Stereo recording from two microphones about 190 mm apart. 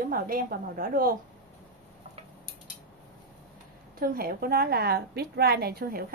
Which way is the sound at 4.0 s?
50° right (ahead or behind).